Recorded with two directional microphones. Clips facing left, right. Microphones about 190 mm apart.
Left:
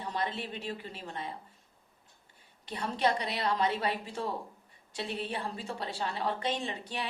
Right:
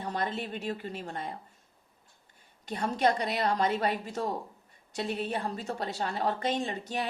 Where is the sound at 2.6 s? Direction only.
45° right (ahead or behind).